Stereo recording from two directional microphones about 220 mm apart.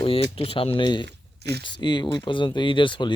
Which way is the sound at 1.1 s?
50° right (ahead or behind).